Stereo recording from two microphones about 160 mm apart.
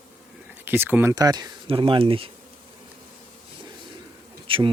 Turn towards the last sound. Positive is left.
turn(degrees=-35)  # may be behind; listen again after turning